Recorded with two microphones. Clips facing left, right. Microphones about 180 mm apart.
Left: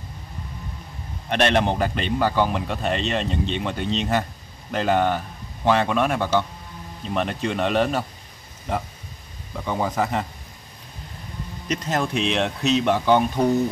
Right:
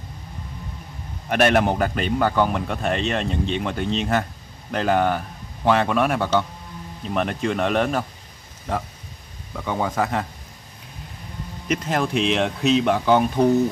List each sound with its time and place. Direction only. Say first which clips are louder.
1.3 s speech: right 2 dB; 5° right (ahead or behind)
9.7 s speech: even; centre (ahead or behind)
11.6 s speech: right 2 dB; 5° right (ahead or behind)